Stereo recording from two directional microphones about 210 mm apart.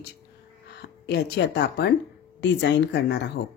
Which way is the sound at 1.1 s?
50° left (ahead or behind).